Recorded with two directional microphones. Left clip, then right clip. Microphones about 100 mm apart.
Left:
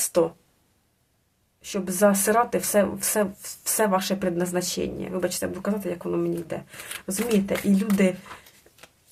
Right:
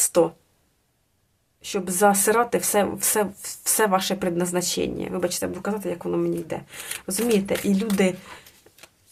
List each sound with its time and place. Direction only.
0.0 s speech: 40° right (ahead or behind)
1.6 s speech: 40° right (ahead or behind)